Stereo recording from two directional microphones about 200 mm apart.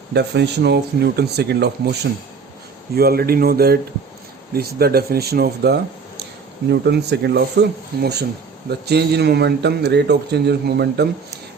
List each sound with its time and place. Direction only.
0.1 s a man's voice: 55° right (ahead or behind)